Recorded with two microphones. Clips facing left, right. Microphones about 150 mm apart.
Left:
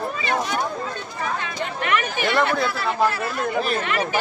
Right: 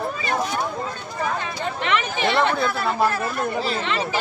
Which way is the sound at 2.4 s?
Centre (ahead or behind).